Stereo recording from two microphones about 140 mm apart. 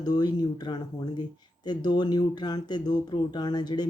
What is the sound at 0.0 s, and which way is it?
Speech, 30° left (ahead or behind).